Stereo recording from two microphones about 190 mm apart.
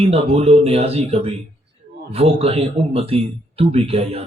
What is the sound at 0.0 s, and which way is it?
Speech, 30° right (ahead or behind).